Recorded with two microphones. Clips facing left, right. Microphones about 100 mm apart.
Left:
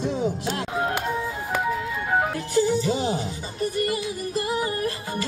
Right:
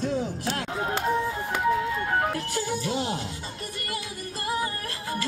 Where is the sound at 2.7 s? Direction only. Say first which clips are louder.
Left 5 dB; centre (ahead or behind).